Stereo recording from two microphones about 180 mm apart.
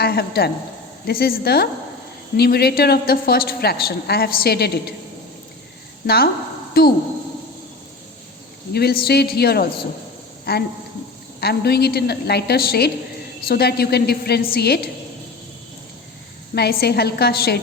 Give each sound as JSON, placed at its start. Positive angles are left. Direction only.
{"t": 0.0, "sound": "a woman's voice", "side_deg": 60}
{"t": 6.1, "sound": "a woman's voice", "side_deg": 60}
{"t": 8.7, "sound": "a woman's voice", "side_deg": 60}
{"t": 16.6, "sound": "a woman's voice", "side_deg": 60}